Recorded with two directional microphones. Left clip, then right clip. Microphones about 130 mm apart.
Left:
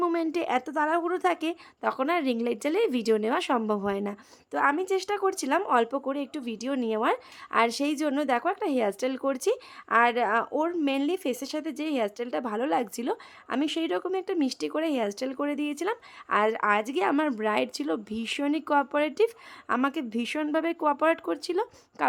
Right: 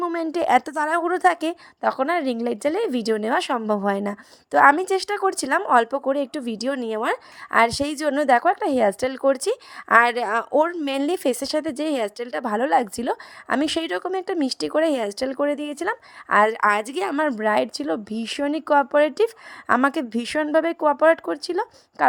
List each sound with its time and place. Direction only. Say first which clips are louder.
0.1 s a woman's voice: right 7 dB; 30° right (ahead or behind)
4.6 s speech: right 9 dB; 50° right (ahead or behind)
9.9 s a woman's voice: right 5 dB; 50° right (ahead or behind); by 19.3 s 35° right (ahead or behind)
19.6 s speech: right 8 dB; 50° right (ahead or behind); by 22.0 s 25° right (ahead or behind)